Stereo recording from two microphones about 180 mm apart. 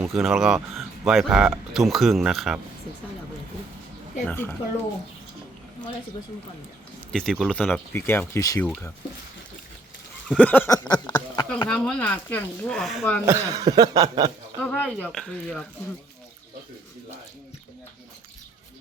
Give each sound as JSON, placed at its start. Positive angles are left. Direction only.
{"t": 0.0, "sound": "speech", "side_deg": 0}
{"t": 4.3, "sound": "speech", "side_deg": 10}
{"t": 7.1, "sound": "speech", "side_deg": 5}
{"t": 8.6, "sound": "speech", "side_deg": 5}
{"t": 10.2, "sound": "speech", "side_deg": 5}
{"t": 10.8, "sound": "speech", "side_deg": 20}
{"t": 11.7, "sound": "speech", "side_deg": 5}
{"t": 13.2, "sound": "a sound", "side_deg": -15}
{"t": 14.6, "sound": "speech", "side_deg": 5}